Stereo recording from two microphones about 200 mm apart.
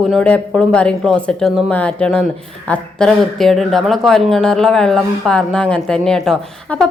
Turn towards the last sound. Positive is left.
turn(degrees=5)  # may be behind; listen again after turning